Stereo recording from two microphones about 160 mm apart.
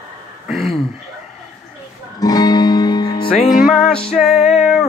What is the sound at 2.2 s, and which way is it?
Music, 25° left (ahead or behind).